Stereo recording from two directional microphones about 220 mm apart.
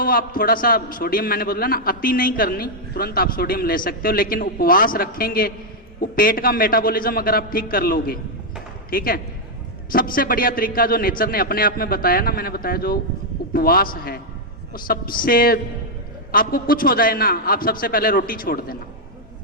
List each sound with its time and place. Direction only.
0.0 s a man's voice: 40° left (ahead or behind)